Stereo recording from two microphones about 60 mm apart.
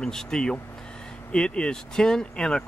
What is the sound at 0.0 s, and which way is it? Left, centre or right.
Speech, centre.